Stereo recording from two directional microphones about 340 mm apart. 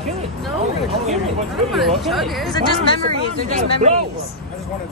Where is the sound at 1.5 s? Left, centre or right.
Centre.